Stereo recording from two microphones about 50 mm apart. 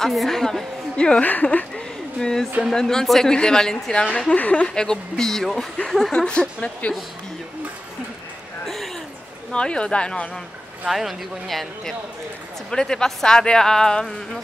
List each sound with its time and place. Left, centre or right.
0.0 s speech: centre
0.9 s a woman's voice: centre
1.2 s speech: left
2.1 s a woman's voice: centre
4.4 s speech: left
4.6 s speech: centre
8.6 s a sound: centre
9.5 s a woman's voice: centre
10.9 s speech: centre